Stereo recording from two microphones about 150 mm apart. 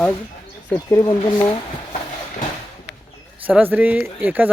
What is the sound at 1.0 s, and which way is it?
Speech, 25° left (ahead or behind).